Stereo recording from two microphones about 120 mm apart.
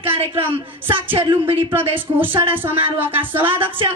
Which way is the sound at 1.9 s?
15° right (ahead or behind).